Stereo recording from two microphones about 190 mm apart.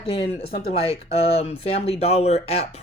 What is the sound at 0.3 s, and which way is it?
Speech, 30° left (ahead or behind).